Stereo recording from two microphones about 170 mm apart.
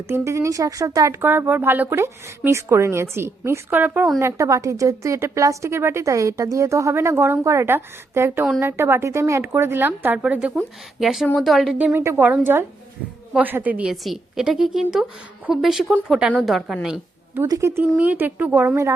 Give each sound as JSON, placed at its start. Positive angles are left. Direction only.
{"t": 0.1, "sound": "a woman's voice", "side_deg": -15}